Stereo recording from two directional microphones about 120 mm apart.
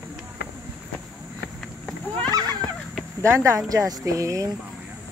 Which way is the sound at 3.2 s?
25° right (ahead or behind).